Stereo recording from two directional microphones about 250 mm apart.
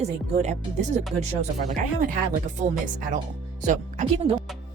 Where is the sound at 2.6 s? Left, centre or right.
Right.